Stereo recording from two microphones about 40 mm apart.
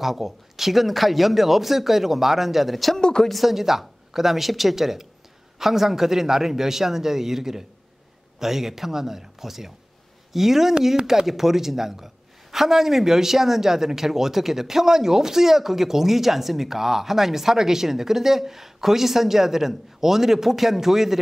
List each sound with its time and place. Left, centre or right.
0.0 s speech: centre
3.0 s speech: centre
3.3 s a woman's voice: centre